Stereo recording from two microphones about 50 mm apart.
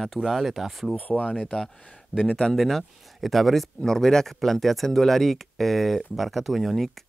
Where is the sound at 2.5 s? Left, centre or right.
Centre.